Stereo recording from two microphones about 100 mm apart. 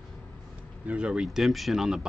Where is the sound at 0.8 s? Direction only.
10° right (ahead or behind).